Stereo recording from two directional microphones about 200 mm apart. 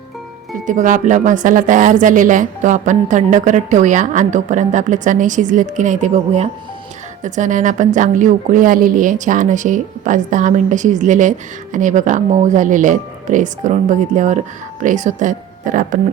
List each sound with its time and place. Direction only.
0.7 s a woman's voice: 40° right (ahead or behind)